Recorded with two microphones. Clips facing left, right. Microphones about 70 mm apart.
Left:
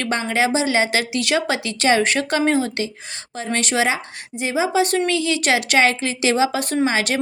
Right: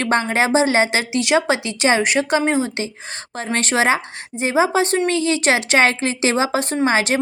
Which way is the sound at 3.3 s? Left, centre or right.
Right.